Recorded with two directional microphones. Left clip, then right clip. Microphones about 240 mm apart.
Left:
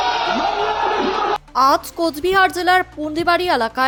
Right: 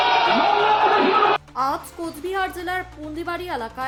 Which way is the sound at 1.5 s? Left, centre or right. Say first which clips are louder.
Left 9 dB; left.